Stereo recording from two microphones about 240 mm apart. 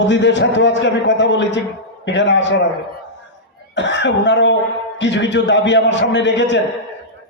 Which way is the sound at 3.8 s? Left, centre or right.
Left.